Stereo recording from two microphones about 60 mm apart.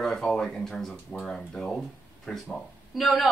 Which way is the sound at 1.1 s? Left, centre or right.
Centre.